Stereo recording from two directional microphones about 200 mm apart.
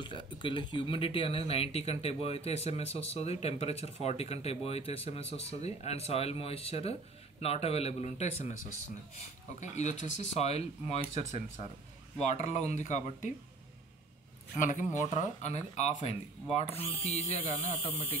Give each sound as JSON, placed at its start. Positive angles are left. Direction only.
{"t": 0.0, "sound": "speech", "side_deg": 25}
{"t": 9.6, "sound": "speech", "side_deg": 35}
{"t": 14.6, "sound": "speech", "side_deg": 35}